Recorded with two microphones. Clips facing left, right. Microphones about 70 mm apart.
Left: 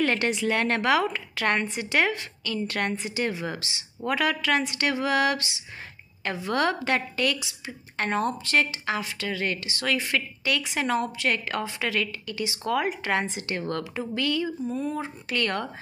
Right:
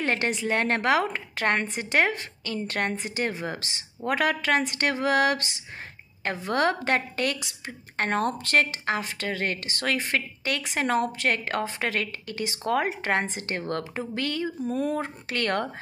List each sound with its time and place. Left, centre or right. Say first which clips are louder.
0.0 s a woman's voice: left 2 dB; right
14.6 s speech: right 2 dB; right